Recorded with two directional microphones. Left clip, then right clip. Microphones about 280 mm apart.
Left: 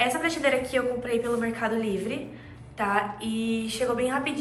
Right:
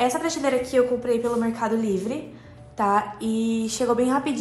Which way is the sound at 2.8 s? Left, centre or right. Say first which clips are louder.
Right 4 dB; centre.